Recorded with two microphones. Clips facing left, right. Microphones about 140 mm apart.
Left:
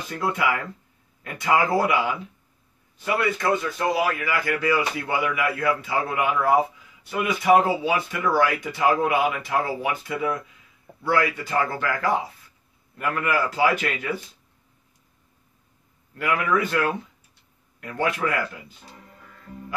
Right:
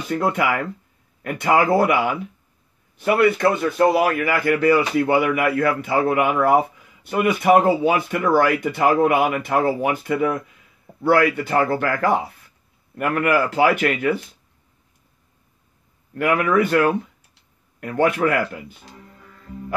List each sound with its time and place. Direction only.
0.1 s speech: 60° right (ahead or behind)
16.2 s speech: 55° right (ahead or behind)